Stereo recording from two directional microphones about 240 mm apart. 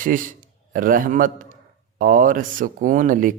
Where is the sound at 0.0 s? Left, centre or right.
Right.